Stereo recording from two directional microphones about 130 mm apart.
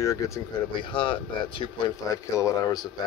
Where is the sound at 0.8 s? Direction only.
40° left (ahead or behind).